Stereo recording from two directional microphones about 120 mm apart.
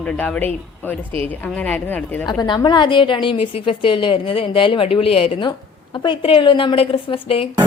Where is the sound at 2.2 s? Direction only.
35° left (ahead or behind).